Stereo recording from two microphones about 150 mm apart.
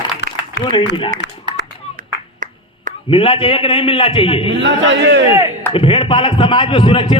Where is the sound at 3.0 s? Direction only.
35° left (ahead or behind).